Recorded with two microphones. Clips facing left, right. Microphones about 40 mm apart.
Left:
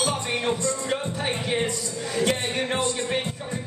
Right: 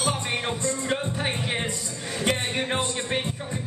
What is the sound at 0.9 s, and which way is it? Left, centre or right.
Music, centre.